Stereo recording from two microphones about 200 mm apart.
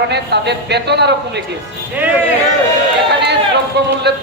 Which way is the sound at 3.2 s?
55° right (ahead or behind).